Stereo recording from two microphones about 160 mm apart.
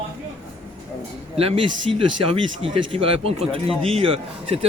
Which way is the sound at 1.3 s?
35° right (ahead or behind).